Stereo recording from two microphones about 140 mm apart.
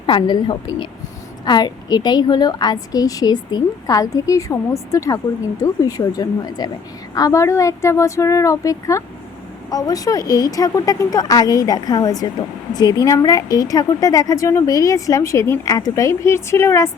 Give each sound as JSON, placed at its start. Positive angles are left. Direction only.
{"t": 0.0, "sound": "a woman's voice", "side_deg": 35}